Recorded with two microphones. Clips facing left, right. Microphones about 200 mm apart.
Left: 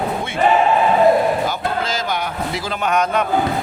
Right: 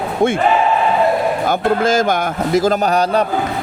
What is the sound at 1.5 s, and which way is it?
A man's voice, 50° right (ahead or behind).